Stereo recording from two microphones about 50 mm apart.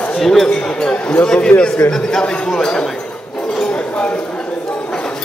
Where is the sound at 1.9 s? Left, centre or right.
Centre.